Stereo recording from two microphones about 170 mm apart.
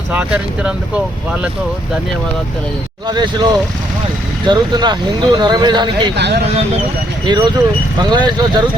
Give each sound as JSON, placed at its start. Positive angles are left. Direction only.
{"t": 0.1, "sound": "speech", "side_deg": -5}
{"t": 3.1, "sound": "speech", "side_deg": -25}
{"t": 7.3, "sound": "speech", "side_deg": -25}